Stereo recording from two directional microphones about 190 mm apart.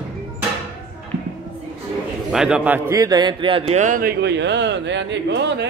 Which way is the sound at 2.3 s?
5° right (ahead or behind).